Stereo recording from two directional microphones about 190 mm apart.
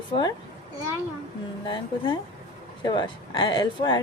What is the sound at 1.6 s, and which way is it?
Speech, 25° left (ahead or behind).